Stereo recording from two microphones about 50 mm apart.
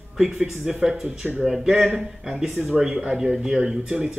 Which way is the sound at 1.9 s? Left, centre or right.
Centre.